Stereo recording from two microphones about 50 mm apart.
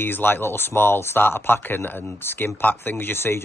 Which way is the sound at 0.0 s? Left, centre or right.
Left.